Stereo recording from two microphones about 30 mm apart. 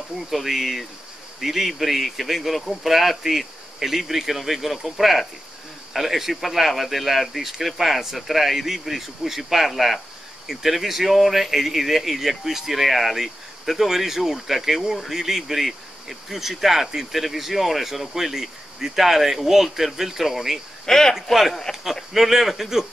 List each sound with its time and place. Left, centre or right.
0.3 s speech: centre
20.8 s speech: left
21.1 s speech: centre